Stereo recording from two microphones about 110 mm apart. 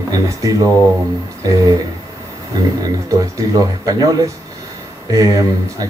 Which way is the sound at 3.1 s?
35° right (ahead or behind).